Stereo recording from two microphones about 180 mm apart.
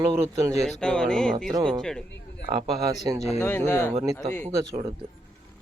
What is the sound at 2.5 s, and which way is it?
Speech, 20° right (ahead or behind).